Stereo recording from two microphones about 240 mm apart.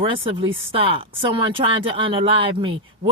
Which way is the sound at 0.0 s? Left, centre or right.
Right.